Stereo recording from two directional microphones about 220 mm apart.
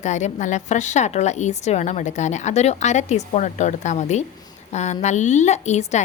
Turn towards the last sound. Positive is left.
turn(degrees=30)  # may be behind; listen again after turning